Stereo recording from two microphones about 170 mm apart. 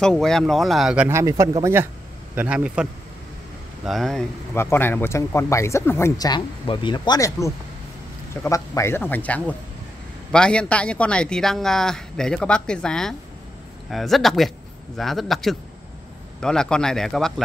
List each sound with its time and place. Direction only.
0.0 s speech: 5° left (ahead or behind)
1.0 s a man's voice: 15° right (ahead or behind); by 4.2 s centre (ahead or behind)
4.6 s speech: 15° left (ahead or behind)